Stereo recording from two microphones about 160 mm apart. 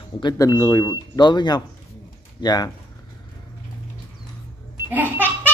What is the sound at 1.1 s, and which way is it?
Speech, 25° left (ahead or behind).